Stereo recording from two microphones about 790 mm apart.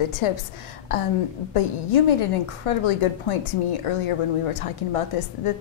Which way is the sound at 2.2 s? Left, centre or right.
Left.